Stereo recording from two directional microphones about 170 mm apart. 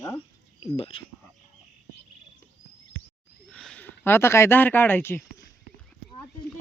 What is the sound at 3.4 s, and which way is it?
Speech, 5° left (ahead or behind).